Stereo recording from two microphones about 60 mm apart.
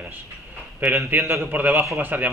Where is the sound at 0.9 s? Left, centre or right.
Right.